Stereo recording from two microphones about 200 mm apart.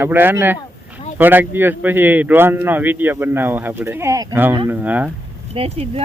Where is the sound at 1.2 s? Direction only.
10° right (ahead or behind).